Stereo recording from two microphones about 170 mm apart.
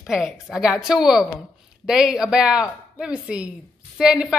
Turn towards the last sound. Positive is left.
turn(degrees=-5)  # may be behind; listen again after turning